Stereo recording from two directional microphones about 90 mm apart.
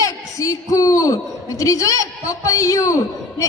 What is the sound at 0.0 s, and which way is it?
A man's voice, 40° left (ahead or behind).